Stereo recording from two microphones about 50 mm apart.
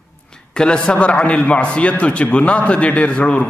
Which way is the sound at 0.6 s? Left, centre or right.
Centre.